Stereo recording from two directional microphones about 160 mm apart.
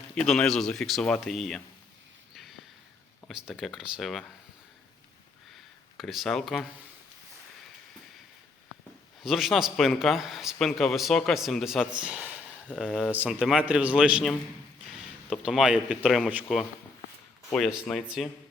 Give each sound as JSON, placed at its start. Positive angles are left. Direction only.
{"t": 0.2, "sound": "a man's voice", "side_deg": 5}
{"t": 2.3, "sound": "a sound", "side_deg": 0}
{"t": 3.2, "sound": "a man's voice", "side_deg": 0}
{"t": 6.0, "sound": "a man's voice", "side_deg": 0}
{"t": 9.2, "sound": "a man's voice", "side_deg": 0}
{"t": 12.6, "sound": "a man's voice", "side_deg": 5}
{"t": 17.5, "sound": "a man's voice", "side_deg": 5}